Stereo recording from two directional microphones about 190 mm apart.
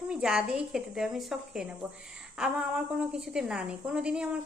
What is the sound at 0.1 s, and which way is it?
A woman's voice, 5° right (ahead or behind).